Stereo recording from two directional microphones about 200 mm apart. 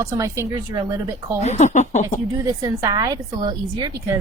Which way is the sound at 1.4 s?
35° left (ahead or behind).